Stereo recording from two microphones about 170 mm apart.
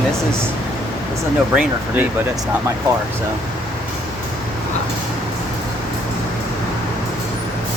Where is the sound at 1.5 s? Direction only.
10° right (ahead or behind).